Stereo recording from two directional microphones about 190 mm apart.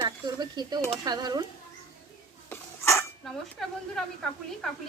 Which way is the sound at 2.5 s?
15° left (ahead or behind).